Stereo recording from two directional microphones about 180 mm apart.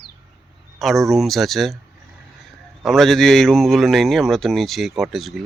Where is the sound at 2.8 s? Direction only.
Centre (ahead or behind).